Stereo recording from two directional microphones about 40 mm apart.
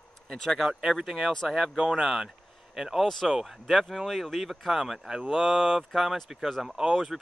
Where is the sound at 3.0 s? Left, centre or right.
Centre.